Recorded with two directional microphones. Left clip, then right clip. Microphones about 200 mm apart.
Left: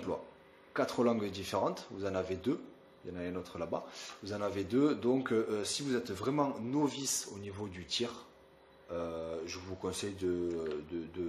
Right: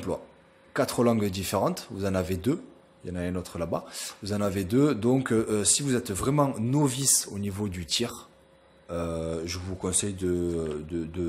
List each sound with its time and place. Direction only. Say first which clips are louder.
0.7 s speech: right 7 dB; 30° right (ahead or behind)